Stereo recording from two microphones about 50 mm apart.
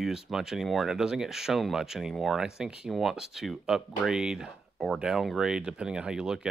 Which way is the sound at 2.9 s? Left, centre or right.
Centre.